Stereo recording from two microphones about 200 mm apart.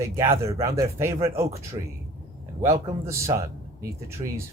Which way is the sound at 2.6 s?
15° right (ahead or behind).